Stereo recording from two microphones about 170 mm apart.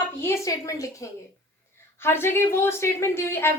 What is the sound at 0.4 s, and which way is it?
A woman's voice, 20° left (ahead or behind).